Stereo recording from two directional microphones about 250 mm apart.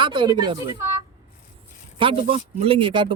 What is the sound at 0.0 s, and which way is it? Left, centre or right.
A woman's voice, centre.